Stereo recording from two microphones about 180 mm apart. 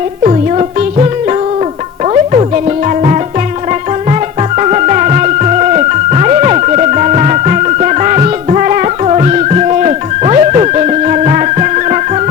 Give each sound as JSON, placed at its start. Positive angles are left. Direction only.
{"t": 4.5, "sound": "music", "side_deg": -40}